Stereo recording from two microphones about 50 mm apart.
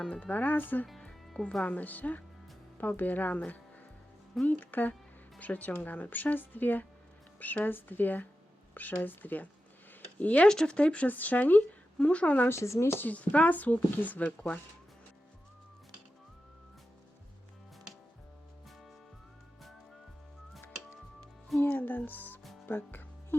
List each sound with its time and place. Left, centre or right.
0.1 s speech: left
0.9 s music: centre
1.6 s speech: left
4.4 s speech: left
10.5 s speech: centre
10.8 s speech: left
12.5 s speech: left
13.0 s speech: left
21.6 s music: left
22.6 s speech: left